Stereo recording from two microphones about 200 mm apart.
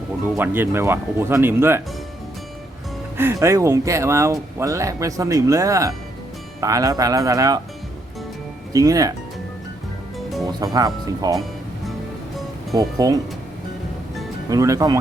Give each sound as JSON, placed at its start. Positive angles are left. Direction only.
{"t": 0.3, "sound": "speech", "side_deg": -10}
{"t": 3.2, "sound": "speech", "side_deg": -15}
{"t": 8.7, "sound": "speech", "side_deg": -15}
{"t": 10.4, "sound": "speech", "side_deg": -20}
{"t": 12.7, "sound": "speech", "side_deg": -20}
{"t": 14.5, "sound": "speech", "side_deg": -15}